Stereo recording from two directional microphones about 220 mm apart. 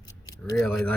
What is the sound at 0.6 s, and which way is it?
Speech, 5° left (ahead or behind).